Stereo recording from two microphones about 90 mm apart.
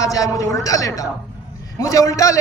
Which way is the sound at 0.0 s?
40° left (ahead or behind).